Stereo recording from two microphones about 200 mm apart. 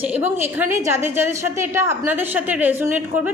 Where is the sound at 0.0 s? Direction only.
10° right (ahead or behind).